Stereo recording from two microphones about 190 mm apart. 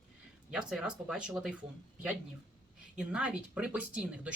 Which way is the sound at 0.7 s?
5° right (ahead or behind).